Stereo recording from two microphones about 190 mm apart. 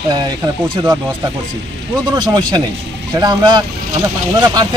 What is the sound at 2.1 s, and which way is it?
Speech, 20° right (ahead or behind).